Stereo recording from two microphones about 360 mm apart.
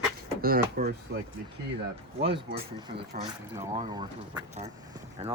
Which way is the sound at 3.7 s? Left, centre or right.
Centre.